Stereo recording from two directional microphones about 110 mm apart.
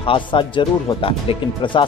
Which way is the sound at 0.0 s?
50° left (ahead or behind).